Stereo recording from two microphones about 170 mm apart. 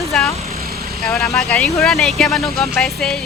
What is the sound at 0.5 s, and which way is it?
Vehicle, 65° right (ahead or behind).